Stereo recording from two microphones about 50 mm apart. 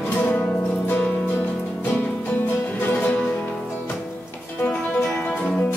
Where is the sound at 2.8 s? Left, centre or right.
Left.